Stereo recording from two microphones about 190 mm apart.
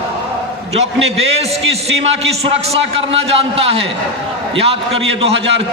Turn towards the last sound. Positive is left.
turn(degrees=-30)  # may be behind; listen again after turning